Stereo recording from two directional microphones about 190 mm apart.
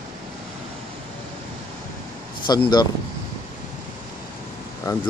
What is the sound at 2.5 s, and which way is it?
Speech, 20° left (ahead or behind).